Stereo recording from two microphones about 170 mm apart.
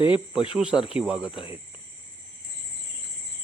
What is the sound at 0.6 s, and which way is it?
Cricket, 5° right (ahead or behind).